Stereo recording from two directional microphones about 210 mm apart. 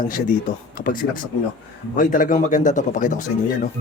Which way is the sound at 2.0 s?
40° left (ahead or behind).